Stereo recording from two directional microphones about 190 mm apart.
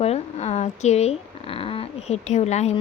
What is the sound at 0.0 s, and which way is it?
Speech, 35° left (ahead or behind).